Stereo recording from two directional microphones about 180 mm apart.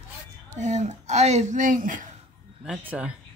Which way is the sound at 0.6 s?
40° right (ahead or behind).